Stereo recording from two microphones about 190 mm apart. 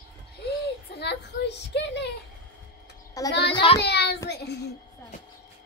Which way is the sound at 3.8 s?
60° left (ahead or behind).